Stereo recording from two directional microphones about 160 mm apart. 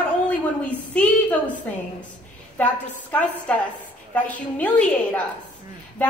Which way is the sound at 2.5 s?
10° left (ahead or behind).